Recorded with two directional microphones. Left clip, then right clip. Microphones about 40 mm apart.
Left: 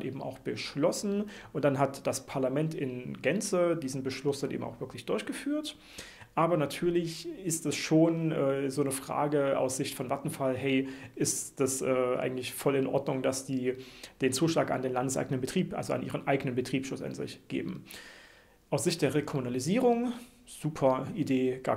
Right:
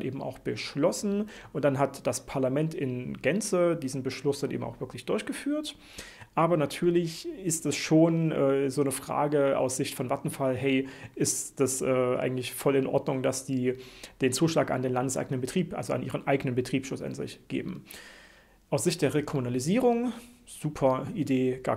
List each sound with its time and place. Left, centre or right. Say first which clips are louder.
0.0 s speech: right 3 dB; right